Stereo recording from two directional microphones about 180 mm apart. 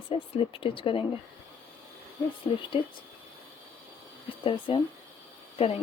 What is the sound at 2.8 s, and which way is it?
Speech, 30° left (ahead or behind).